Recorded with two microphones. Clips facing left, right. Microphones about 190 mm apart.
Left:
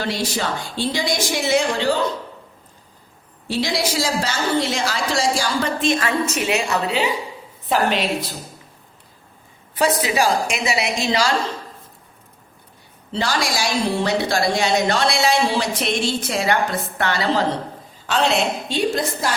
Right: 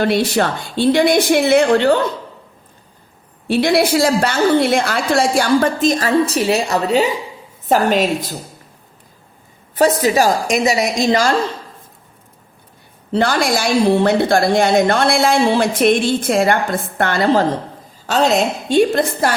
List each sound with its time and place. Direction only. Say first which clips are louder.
0.0 s a woman's voice: right 8 dB; 60° right (ahead or behind)
3.4 s a woman's voice: right 8 dB; 60° right (ahead or behind); by 8.1 s 45° right (ahead or behind)
9.7 s a woman's voice: right 6 dB; 45° right (ahead or behind)
13.1 s a woman's voice: right 7 dB; 55° right (ahead or behind)